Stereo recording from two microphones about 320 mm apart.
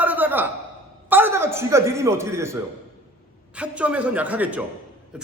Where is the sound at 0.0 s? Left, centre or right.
Centre.